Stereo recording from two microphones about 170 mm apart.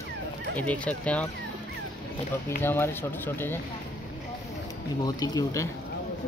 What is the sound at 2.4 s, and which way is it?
Speech, 15° left (ahead or behind).